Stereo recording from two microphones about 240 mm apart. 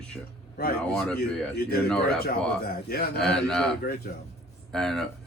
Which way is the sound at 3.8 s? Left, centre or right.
Left.